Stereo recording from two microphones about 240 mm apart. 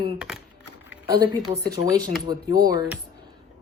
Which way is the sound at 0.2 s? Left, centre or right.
Centre.